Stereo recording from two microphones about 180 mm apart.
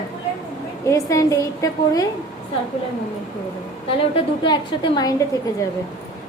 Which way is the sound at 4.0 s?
30° left (ahead or behind).